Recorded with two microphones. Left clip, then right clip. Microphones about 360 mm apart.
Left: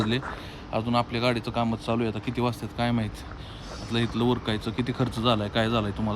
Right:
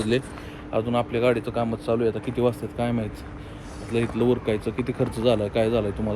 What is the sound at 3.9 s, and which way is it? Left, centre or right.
Speech, centre.